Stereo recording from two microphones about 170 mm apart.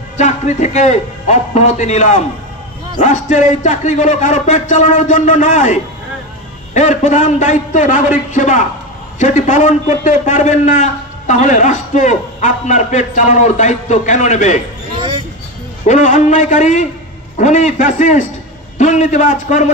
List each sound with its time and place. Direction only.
0.2 s a man's voice: 45° left (ahead or behind)
15.0 s a sound: 30° right (ahead or behind)
15.9 s a man's voice: 45° left (ahead or behind)